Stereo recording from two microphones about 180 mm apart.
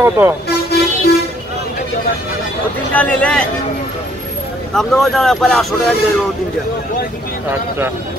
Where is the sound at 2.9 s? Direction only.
10° left (ahead or behind).